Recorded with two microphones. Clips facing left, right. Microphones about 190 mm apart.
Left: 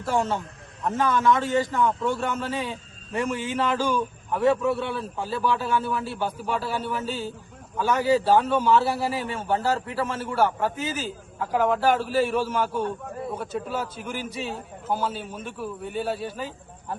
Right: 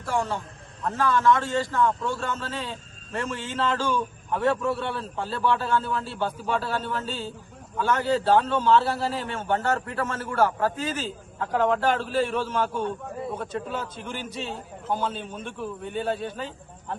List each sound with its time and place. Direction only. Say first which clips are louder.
0.0 s a man's voice: left 3 dB; 25° left (ahead or behind)
4.3 s a man's voice: left 3 dB; 5° left (ahead or behind)